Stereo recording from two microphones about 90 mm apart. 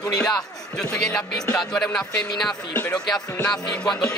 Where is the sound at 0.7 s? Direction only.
5° left (ahead or behind).